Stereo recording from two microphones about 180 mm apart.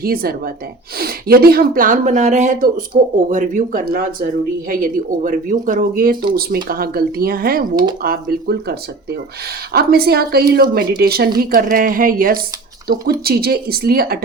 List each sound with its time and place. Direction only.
0.0 s speech: 55° right (ahead or behind)